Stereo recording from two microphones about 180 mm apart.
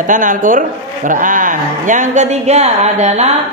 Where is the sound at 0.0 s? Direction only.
45° right (ahead or behind).